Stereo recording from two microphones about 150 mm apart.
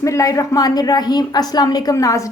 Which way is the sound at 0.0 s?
20° left (ahead or behind).